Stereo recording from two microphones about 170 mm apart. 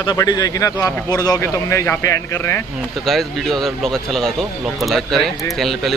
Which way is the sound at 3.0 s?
Centre (ahead or behind).